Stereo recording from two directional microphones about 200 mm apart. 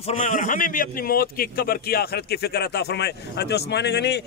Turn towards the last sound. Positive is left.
turn(degrees=55)  # may be behind; listen again after turning